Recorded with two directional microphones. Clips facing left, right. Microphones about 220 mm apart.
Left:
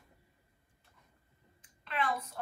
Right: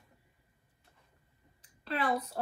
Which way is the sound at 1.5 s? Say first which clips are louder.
Right 2 dB; 35° right (ahead or behind).